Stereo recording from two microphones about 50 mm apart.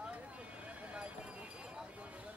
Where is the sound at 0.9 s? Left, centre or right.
Right.